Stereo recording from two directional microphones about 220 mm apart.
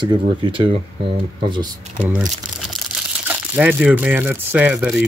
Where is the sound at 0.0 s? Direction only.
20° right (ahead or behind).